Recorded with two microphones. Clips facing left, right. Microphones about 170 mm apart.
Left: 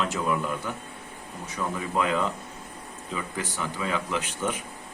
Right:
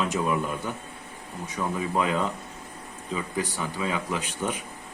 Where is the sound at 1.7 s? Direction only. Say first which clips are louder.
Even; 15° right (ahead or behind).